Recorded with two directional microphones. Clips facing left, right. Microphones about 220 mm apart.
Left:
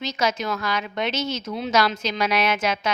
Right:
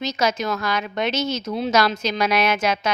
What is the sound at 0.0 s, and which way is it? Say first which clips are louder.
A woman's voice: right 2 dB; 40° right (ahead or behind).